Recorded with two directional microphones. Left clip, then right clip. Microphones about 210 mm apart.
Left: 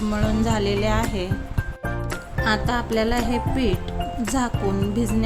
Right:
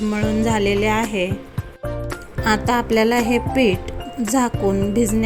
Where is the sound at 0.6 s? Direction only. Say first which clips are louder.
Right 5 dB; 25° left (ahead or behind).